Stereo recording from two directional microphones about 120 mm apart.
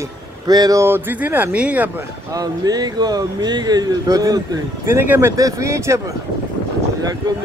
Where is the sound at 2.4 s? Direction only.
30° right (ahead or behind).